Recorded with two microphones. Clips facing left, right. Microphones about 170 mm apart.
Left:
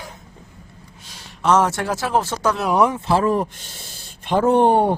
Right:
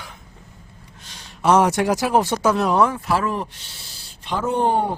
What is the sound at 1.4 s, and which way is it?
Speech, 10° right (ahead or behind).